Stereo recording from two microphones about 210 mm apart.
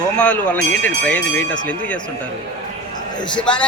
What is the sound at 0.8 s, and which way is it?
Speech, 5° left (ahead or behind).